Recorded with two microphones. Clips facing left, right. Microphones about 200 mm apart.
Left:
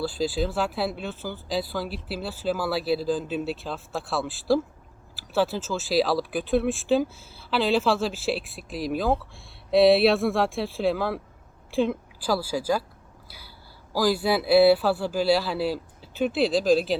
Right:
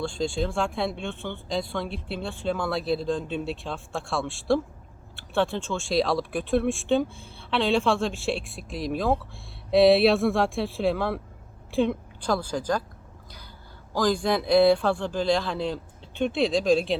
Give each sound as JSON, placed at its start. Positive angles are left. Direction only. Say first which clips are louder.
{"t": 0.0, "sound": "speech", "louder": "left 1 dB", "side_deg": 5}
{"t": 13.2, "sound": "a sound", "louder": "right 1 dB", "side_deg": 5}
{"t": 13.9, "sound": "speech", "louder": "left 1 dB", "side_deg": 5}